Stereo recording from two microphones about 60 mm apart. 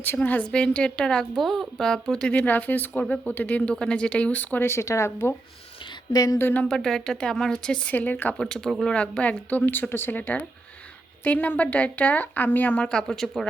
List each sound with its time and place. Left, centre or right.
0.0 s a woman's voice: left; by 1.3 s centre
1.4 s a woman's voice: centre
2.5 s a woman's voice: left
4.6 s speech: left
6.1 s a sound: left
6.4 s a woman's voice: left
6.7 s a woman's voice: centre
7.9 s speech: left
8.4 s a woman's voice: centre
9.5 s a woman's voice: left
12.8 s a woman's voice: centre